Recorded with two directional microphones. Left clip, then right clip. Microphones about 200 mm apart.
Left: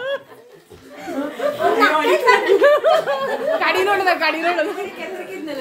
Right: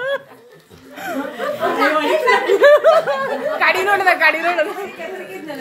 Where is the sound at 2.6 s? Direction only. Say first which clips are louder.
Right 3 dB; 5° right (ahead or behind).